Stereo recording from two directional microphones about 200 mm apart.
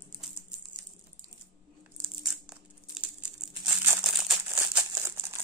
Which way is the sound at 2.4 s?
5° right (ahead or behind).